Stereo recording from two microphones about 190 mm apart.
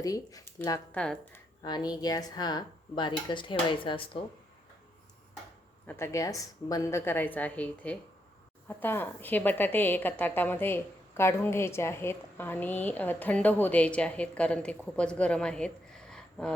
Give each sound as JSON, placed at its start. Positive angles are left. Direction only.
{"t": 0.0, "sound": "a woman's voice", "side_deg": 20}
{"t": 0.9, "sound": "speech", "side_deg": 5}
{"t": 1.6, "sound": "speech", "side_deg": 20}
{"t": 5.8, "sound": "a woman's voice", "side_deg": 10}